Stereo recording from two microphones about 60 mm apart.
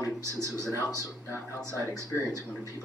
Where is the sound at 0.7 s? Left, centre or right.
Right.